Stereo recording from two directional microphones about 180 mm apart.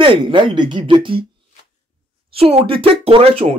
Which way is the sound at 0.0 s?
30° right (ahead or behind).